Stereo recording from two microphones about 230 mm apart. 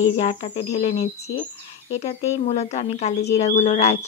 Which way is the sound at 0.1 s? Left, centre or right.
Left.